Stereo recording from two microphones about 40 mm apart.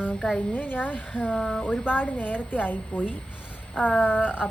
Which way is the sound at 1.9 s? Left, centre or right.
Left.